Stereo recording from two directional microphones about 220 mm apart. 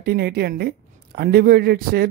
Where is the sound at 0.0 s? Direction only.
45° right (ahead or behind).